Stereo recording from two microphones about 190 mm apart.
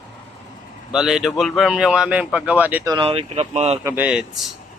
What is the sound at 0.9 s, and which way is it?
A man's voice, 5° right (ahead or behind).